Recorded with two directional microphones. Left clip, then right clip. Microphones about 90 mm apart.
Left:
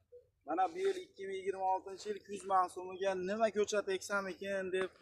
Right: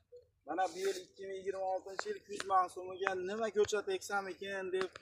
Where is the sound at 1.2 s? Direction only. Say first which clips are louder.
Left 1 dB; 35° left (ahead or behind).